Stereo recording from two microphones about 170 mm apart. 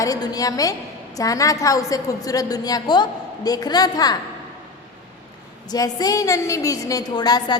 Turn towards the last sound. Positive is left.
turn(degrees=25)  # may be behind; listen again after turning